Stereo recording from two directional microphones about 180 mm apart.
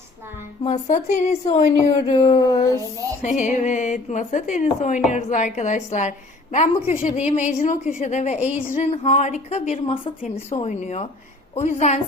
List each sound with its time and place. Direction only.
0.6 s a woman's voice: 40° left (ahead or behind)
2.5 s child singing: 20° left (ahead or behind)
3.2 s a woman's voice: 45° left (ahead or behind)